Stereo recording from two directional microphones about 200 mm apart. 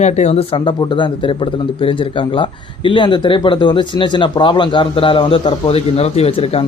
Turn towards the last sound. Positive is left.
turn(degrees=30)  # may be behind; listen again after turning